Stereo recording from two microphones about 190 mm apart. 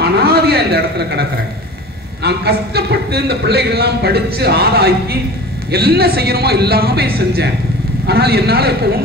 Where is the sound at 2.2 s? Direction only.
55° right (ahead or behind).